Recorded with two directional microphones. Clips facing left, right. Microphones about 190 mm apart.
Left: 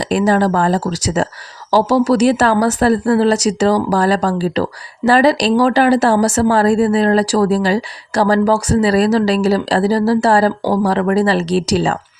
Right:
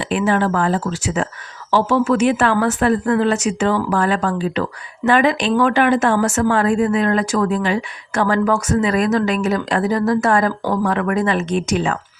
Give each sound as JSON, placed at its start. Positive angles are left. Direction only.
{"t": 0.1, "sound": "speech", "side_deg": 35}